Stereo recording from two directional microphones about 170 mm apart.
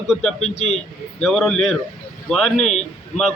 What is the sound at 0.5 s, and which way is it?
Speech, 40° left (ahead or behind).